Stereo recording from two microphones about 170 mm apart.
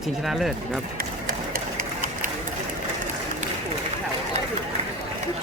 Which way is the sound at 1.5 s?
50° right (ahead or behind).